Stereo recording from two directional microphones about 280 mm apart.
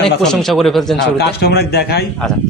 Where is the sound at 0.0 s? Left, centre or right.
Centre.